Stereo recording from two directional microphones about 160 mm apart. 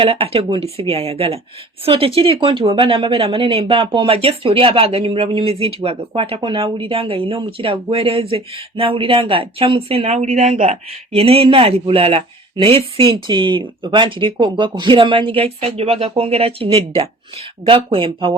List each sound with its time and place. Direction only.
0.0 s speech: 35° right (ahead or behind)